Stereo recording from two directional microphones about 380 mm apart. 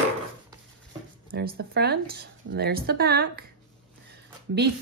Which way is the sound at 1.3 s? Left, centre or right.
Right.